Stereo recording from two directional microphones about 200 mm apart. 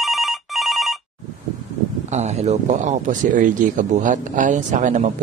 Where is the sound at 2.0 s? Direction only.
35° right (ahead or behind).